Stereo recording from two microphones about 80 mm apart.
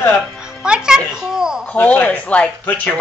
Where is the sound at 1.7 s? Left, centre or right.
Left.